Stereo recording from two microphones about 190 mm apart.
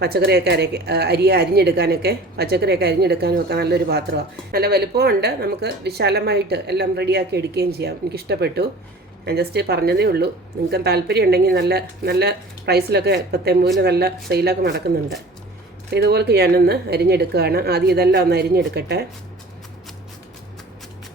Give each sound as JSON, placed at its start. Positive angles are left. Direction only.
{"t": 0.0, "sound": "a woman's voice", "side_deg": -55}
{"t": 15.9, "sound": "a woman's voice", "side_deg": -60}